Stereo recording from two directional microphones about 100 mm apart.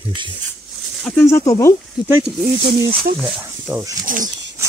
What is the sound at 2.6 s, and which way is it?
Speech, 60° right (ahead or behind).